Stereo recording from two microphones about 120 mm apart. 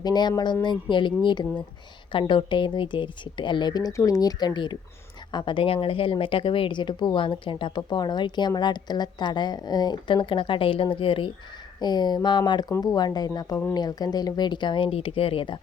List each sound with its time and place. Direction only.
0.0 s a woman's voice: 35° left (ahead or behind)